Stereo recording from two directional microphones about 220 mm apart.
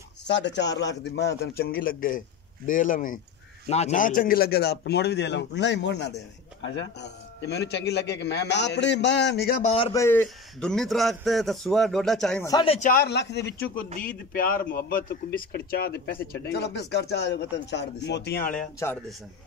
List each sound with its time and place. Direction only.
0.2 s a man's voice: 50° left (ahead or behind)
9.6 s a man's voice: 30° left (ahead or behind)
9.9 s a man's voice: 10° left (ahead or behind)
12.4 s a man's voice: 20° left (ahead or behind)
12.7 s a man's voice: 40° left (ahead or behind)
18.8 s a man's voice: 10° left (ahead or behind)